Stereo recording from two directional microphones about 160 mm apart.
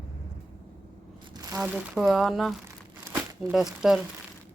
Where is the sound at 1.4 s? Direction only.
25° right (ahead or behind).